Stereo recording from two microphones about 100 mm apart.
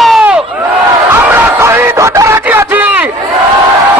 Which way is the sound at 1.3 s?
20° right (ahead or behind).